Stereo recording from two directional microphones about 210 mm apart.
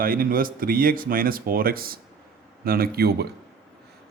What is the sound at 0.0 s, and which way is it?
A man's voice, 45° right (ahead or behind).